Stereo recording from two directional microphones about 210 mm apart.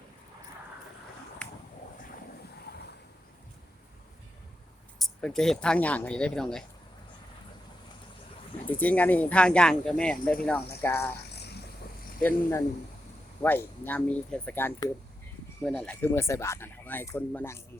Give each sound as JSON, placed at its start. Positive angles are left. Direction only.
{"t": 4.9, "sound": "speech", "side_deg": 0}
{"t": 8.8, "sound": "speech", "side_deg": 5}
{"t": 11.2, "sound": "a sound", "side_deg": 50}
{"t": 12.2, "sound": "speech", "side_deg": 15}